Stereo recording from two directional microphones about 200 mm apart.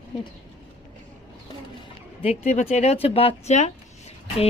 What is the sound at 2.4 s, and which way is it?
Speech, 35° left (ahead or behind).